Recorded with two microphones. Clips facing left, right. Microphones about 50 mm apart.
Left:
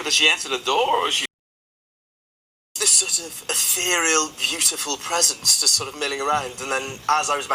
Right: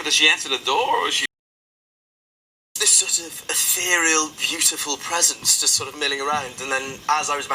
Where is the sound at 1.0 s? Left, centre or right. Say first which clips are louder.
Right 1 dB; right.